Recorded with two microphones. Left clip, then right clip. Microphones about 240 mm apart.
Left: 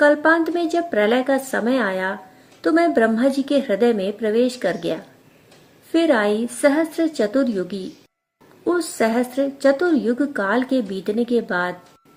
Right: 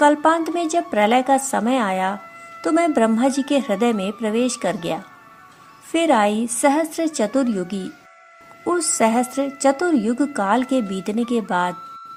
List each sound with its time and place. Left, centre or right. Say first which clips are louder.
0.0 s a woman's voice: even; right
8.6 s a woman's voice: right 1 dB; right